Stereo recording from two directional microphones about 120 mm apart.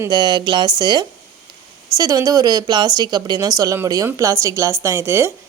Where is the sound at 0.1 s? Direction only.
35° right (ahead or behind).